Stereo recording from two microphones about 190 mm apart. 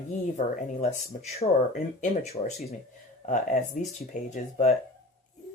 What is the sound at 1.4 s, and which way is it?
Speech, 30° left (ahead or behind).